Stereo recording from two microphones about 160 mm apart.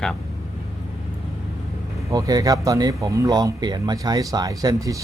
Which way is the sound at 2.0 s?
25° right (ahead or behind).